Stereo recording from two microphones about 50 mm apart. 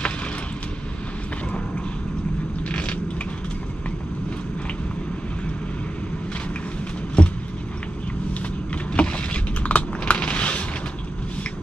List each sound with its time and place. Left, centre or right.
2.7 s a sound: left
7.2 s vehicle: left
8.9 s typing: left